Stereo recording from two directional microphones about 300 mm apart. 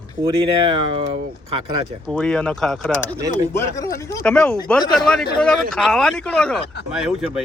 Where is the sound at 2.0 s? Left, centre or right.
Centre.